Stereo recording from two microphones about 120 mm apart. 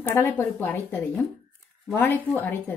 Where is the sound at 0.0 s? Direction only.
20° left (ahead or behind).